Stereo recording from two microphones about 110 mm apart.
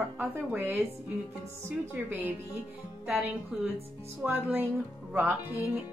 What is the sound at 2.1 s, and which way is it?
Speech, 15° right (ahead or behind).